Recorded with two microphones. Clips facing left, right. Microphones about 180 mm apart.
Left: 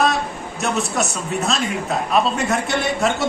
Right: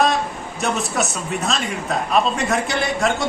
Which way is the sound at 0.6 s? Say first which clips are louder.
Even; centre (ahead or behind).